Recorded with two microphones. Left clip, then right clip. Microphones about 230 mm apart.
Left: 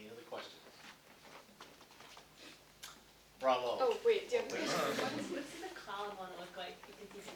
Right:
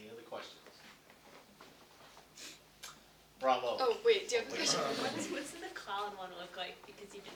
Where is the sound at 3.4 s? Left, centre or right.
Centre.